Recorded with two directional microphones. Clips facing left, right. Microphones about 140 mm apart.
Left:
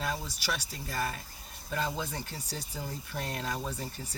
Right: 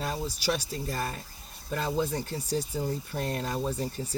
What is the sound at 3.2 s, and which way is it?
Speech, 40° right (ahead or behind).